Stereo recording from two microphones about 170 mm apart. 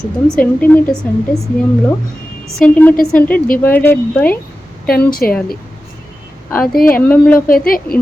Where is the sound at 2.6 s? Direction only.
10° left (ahead or behind).